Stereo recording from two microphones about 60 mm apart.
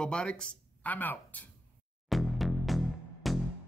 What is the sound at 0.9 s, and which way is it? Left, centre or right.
Speech, left.